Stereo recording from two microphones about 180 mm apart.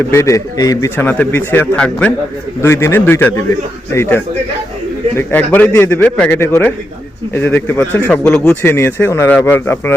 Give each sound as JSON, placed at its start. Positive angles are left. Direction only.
{"t": 0.1, "sound": "speech", "side_deg": 15}